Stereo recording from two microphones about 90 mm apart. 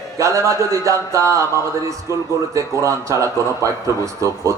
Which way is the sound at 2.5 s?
35° right (ahead or behind).